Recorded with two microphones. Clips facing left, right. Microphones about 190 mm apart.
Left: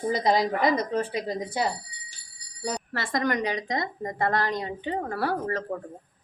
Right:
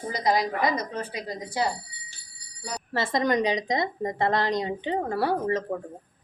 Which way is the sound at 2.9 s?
25° right (ahead or behind).